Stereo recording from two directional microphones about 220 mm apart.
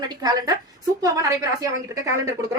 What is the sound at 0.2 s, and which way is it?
Speech, 20° right (ahead or behind).